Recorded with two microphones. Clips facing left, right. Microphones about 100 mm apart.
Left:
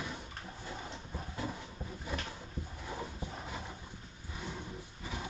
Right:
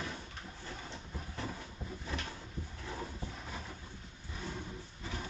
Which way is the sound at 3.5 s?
15° left (ahead or behind).